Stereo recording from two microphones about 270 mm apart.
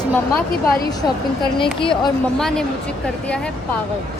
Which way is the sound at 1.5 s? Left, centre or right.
Centre.